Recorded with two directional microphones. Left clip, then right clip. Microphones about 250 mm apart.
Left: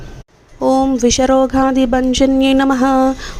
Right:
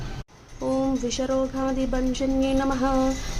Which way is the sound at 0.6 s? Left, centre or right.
Left.